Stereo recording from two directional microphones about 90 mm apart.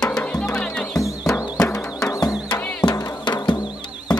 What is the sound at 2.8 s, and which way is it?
Music, 50° left (ahead or behind).